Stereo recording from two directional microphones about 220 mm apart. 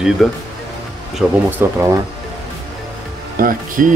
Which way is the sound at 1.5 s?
10° right (ahead or behind).